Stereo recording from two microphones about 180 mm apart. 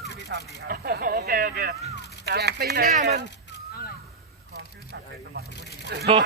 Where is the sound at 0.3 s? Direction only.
60° right (ahead or behind).